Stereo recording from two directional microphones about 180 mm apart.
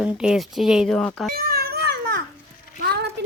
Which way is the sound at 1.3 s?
60° right (ahead or behind).